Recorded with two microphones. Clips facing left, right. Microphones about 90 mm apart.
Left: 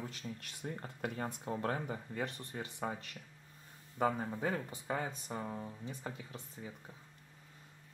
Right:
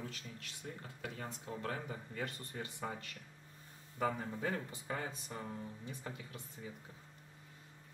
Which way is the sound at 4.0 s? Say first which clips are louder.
Left 3 dB; 20° left (ahead or behind).